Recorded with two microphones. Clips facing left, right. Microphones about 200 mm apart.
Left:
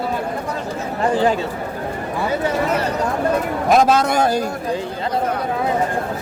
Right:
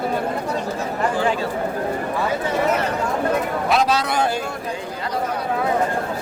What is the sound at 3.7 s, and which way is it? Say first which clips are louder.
Speech: left 6 dB; 50° left (ahead or behind).